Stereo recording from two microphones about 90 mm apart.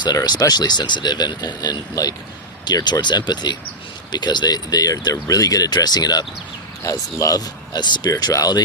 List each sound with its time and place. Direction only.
0.0 s speech: 55° left (ahead or behind)
8.1 s speech: 40° left (ahead or behind)